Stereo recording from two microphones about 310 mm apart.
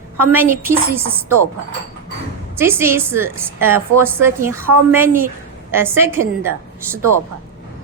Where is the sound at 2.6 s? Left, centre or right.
Centre.